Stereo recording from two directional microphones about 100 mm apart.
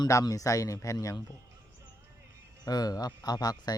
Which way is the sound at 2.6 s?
40° left (ahead or behind).